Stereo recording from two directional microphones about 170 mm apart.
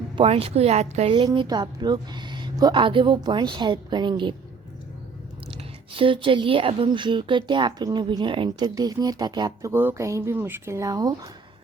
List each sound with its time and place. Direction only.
0.2 s a woman's voice: 35° right (ahead or behind)
5.5 s a woman's voice: 30° right (ahead or behind)